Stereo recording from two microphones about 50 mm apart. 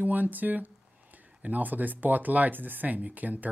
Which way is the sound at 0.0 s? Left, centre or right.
Right.